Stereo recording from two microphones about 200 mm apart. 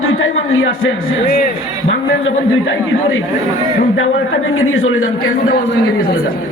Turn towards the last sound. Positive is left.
turn(degrees=90)